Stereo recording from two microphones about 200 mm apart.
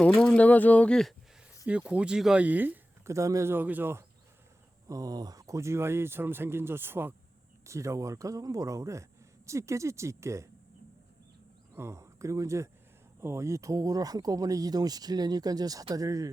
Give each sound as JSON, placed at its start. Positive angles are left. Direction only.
{"t": 0.0, "sound": "speech", "side_deg": 5}
{"t": 11.7, "sound": "speech", "side_deg": -15}